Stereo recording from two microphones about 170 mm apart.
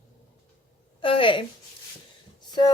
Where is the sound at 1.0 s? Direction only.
30° left (ahead or behind).